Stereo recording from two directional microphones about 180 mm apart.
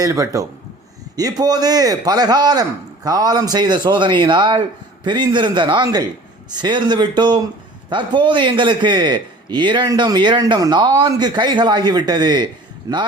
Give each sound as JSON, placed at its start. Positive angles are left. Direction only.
{"t": 0.0, "sound": "a man's voice", "side_deg": -15}